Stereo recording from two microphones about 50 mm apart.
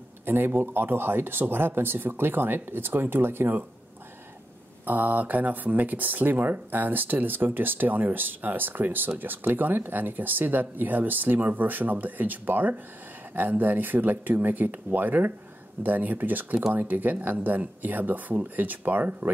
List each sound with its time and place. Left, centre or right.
0.2 s speech: right
4.8 s speech: right